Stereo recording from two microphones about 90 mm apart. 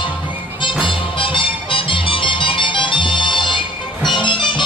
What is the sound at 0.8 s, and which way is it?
Music, 70° left (ahead or behind).